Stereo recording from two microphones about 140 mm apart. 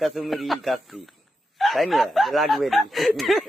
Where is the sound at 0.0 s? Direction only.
Centre (ahead or behind).